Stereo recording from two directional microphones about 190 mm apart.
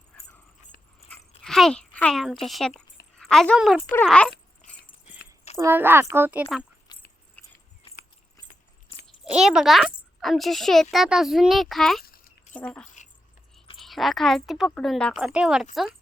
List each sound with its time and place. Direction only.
0.1 s dog: 5° left (ahead or behind)
0.7 s dog: 50° left (ahead or behind)
1.5 s a child's voice: centre (ahead or behind)
4.0 s dog: 5° left (ahead or behind)
5.5 s a woman's voice: 10° right (ahead or behind)
6.9 s a sound: 25° left (ahead or behind)
7.4 s a sound: 10° left (ahead or behind)
7.8 s keys jangling: 30° left (ahead or behind)
9.0 s a child's voice: 5° right (ahead or behind)